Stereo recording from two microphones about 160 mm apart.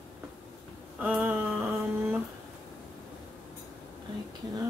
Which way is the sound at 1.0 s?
5° right (ahead or behind).